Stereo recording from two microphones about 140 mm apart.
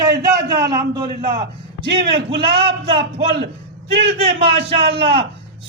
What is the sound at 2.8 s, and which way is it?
A man's voice, 45° right (ahead or behind).